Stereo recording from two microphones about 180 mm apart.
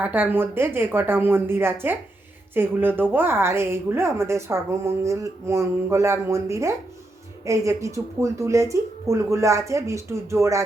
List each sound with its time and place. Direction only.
0.0 s speech: 10° right (ahead or behind)